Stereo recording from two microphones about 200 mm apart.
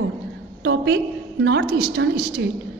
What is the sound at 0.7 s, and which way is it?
A woman's voice, 60° right (ahead or behind).